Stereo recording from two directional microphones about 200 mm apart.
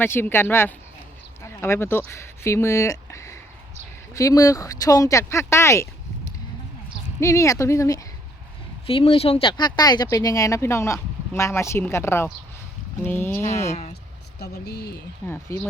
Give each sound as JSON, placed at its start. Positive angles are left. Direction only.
{"t": 0.0, "sound": "speech", "side_deg": 10}
{"t": 7.2, "sound": "speech", "side_deg": 15}
{"t": 8.9, "sound": "speech", "side_deg": 25}
{"t": 13.7, "sound": "speech", "side_deg": 35}
{"t": 14.3, "sound": "speech", "side_deg": 55}
{"t": 15.3, "sound": "speech", "side_deg": 10}